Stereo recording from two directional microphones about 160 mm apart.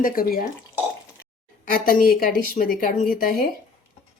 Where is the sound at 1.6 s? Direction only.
60° left (ahead or behind).